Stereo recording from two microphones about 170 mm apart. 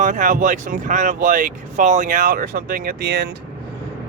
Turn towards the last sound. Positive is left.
turn(degrees=-70)  # may be behind; listen again after turning